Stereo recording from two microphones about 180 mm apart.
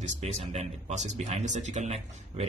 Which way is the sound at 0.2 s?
35° right (ahead or behind).